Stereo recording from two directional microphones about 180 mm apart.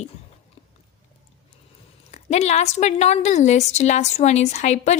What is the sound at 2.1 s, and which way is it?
A woman's voice, 40° left (ahead or behind).